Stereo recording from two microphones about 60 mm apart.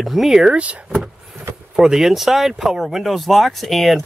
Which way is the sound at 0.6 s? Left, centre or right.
Right.